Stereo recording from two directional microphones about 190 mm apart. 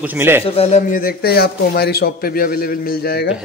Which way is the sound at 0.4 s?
30° left (ahead or behind).